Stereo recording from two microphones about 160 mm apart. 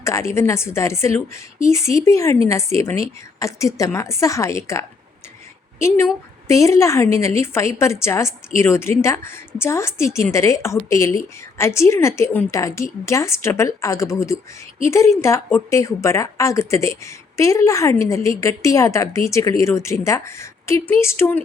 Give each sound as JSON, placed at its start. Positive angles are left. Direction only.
{"t": 0.0, "sound": "a woman's voice", "side_deg": 15}
{"t": 6.5, "sound": "a woman's voice", "side_deg": 20}